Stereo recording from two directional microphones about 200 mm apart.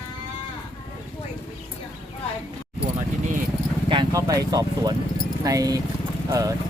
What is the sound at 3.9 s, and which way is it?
Vehicle, 20° right (ahead or behind).